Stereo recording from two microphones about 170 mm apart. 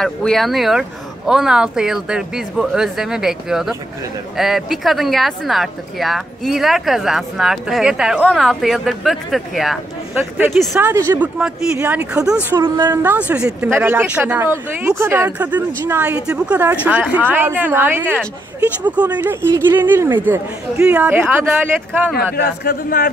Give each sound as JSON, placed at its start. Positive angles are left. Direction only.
{"t": 0.0, "sound": "speech", "side_deg": 5}
{"t": 10.8, "sound": "speech", "side_deg": -15}
{"t": 12.4, "sound": "speech", "side_deg": -20}
{"t": 13.3, "sound": "speech", "side_deg": -5}
{"t": 22.1, "sound": "a man's voice", "side_deg": 65}